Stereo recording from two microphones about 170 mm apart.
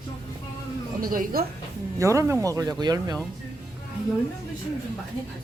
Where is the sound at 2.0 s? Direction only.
15° right (ahead or behind).